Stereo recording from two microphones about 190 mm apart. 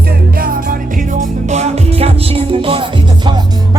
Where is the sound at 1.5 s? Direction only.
35° right (ahead or behind).